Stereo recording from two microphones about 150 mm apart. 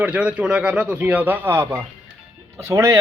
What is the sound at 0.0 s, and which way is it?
A man's voice, 10° right (ahead or behind).